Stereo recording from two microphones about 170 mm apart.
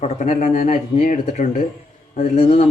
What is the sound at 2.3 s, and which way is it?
Speech, 35° left (ahead or behind).